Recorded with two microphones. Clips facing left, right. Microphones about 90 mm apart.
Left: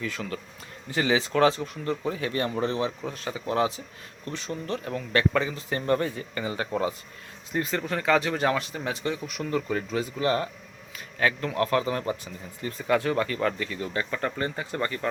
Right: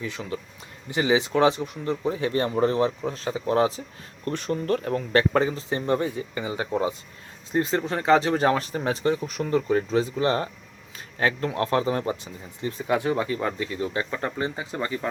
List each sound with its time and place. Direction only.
0.0 s speech: 20° right (ahead or behind)
4.3 s speech: 50° right (ahead or behind)
5.6 s speech: 20° right (ahead or behind)